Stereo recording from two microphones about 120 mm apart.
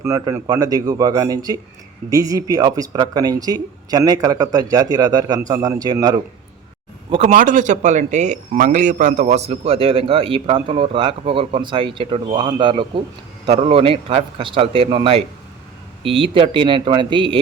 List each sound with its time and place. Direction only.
0.0 s speech: 20° right (ahead or behind)
7.2 s speech: 80° right; by 17.4 s 45° right (ahead or behind)